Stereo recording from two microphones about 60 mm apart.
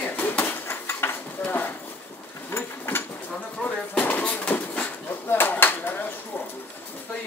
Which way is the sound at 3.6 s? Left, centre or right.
Left.